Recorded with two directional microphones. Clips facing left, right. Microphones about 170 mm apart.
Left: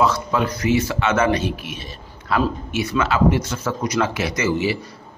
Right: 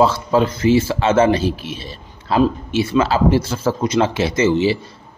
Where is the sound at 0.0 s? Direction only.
30° right (ahead or behind).